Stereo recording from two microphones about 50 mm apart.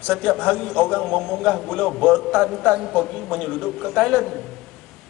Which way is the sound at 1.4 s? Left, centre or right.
Centre.